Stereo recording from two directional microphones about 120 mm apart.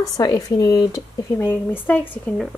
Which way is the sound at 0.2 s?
35° left (ahead or behind).